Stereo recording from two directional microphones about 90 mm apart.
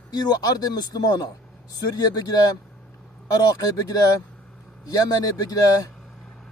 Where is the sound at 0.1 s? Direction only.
50° left (ahead or behind).